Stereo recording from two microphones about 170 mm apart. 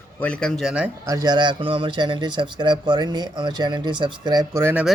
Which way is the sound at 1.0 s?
20° right (ahead or behind).